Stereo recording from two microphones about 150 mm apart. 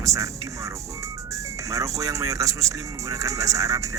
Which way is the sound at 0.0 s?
20° right (ahead or behind).